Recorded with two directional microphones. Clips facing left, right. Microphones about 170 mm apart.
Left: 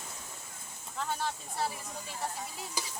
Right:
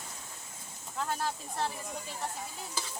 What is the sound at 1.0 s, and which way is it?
Speech, centre (ahead or behind).